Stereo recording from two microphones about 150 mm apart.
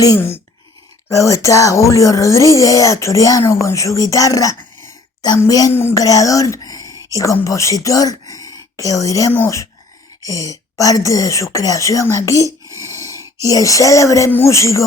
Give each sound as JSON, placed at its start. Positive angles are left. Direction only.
{"t": 0.0, "sound": "speech", "side_deg": 20}
{"t": 12.5, "sound": "a sound", "side_deg": -20}
{"t": 12.8, "sound": "speech", "side_deg": 20}